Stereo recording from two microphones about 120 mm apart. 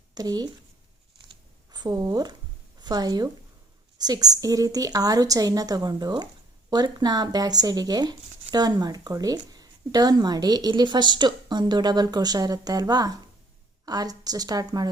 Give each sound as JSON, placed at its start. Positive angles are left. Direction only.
{"t": 0.1, "sound": "speech", "side_deg": -30}
{"t": 1.7, "sound": "a woman's voice", "side_deg": -35}